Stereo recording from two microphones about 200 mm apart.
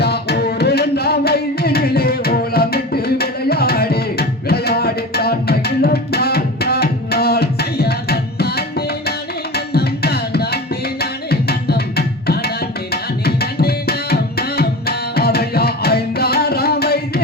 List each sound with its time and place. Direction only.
0.0 s music: 55° left (ahead or behind)
9.6 s tabla: 50° left (ahead or behind)